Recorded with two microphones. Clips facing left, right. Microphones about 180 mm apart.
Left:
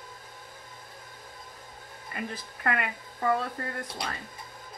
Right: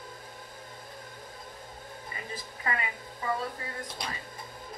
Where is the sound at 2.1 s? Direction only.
70° left (ahead or behind).